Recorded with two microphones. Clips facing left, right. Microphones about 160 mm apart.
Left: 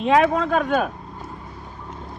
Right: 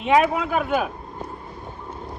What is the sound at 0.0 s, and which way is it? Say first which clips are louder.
Speech: left 1 dB; 5° right (ahead or behind).